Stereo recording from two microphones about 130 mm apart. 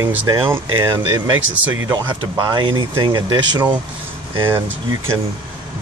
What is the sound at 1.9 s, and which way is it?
Speech, 35° right (ahead or behind).